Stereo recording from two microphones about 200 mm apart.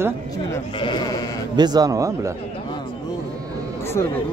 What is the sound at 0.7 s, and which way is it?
Sheep, 20° left (ahead or behind).